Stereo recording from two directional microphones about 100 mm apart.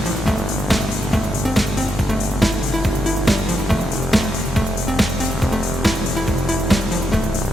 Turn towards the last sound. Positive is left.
turn(degrees=0)  # may be behind; listen again after turning